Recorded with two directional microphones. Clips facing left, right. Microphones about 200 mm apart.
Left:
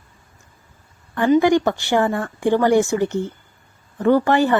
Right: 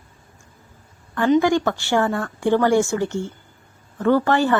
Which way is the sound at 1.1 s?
15° left (ahead or behind).